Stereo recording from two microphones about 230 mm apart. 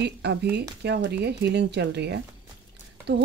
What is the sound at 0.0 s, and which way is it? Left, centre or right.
A woman's voice, right.